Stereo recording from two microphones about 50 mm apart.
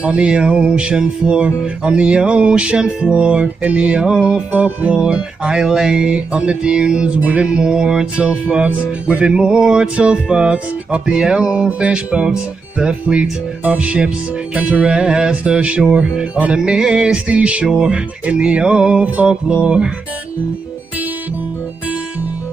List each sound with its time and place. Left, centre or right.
0.1 s music: centre
4.5 s music: right
7.4 s music: centre